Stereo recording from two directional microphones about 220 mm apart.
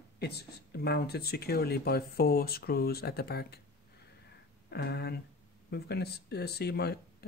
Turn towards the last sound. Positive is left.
turn(degrees=45)  # may be behind; listen again after turning